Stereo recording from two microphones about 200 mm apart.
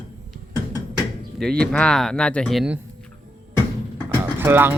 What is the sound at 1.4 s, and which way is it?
Speech, 5° left (ahead or behind).